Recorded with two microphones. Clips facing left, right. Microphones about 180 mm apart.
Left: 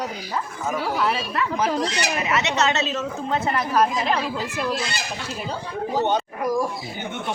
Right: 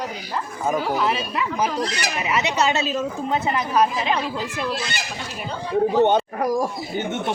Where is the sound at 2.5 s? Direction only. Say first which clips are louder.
Right 1 dB; 10° right (ahead or behind).